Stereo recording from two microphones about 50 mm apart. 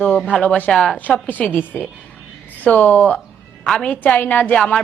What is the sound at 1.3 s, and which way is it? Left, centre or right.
A woman's voice, left.